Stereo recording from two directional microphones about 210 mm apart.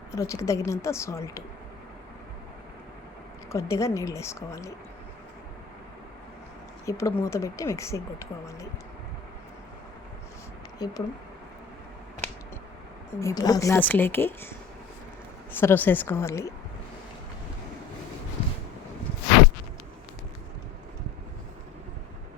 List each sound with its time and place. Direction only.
0.1 s speech: 15° left (ahead or behind)
3.5 s speech: 15° left (ahead or behind)
6.8 s speech: 15° left (ahead or behind)
10.8 s speech: 20° left (ahead or behind)
13.1 s speech: 15° left (ahead or behind)
15.5 s speech: 10° left (ahead or behind)